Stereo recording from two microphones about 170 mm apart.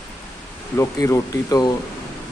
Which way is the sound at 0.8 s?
20° left (ahead or behind).